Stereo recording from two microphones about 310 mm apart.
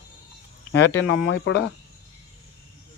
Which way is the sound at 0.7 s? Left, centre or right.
Left.